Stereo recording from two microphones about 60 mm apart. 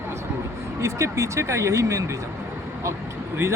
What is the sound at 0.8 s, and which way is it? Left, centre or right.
Speech, right.